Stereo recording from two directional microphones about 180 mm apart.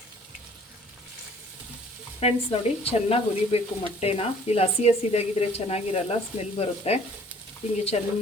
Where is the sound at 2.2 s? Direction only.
35° left (ahead or behind).